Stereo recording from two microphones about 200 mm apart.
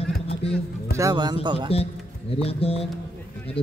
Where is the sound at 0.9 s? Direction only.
20° right (ahead or behind).